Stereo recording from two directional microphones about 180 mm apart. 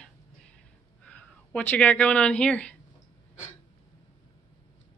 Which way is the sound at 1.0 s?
5° left (ahead or behind).